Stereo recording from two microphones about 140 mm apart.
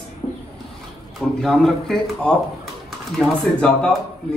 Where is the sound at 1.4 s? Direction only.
5° left (ahead or behind).